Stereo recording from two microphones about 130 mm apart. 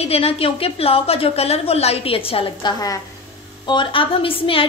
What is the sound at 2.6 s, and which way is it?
Speech, 25° left (ahead or behind).